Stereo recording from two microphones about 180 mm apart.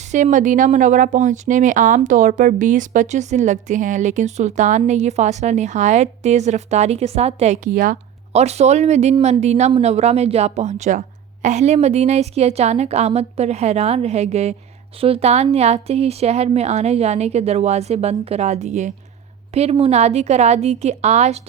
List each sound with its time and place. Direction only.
0.1 s a woman's voice: 45° right (ahead or behind)